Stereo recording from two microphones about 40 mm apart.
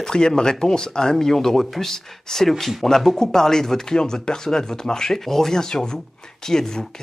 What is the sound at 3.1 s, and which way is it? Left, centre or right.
Speech, centre.